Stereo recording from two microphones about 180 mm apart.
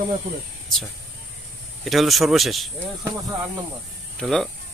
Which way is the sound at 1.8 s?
Centre (ahead or behind).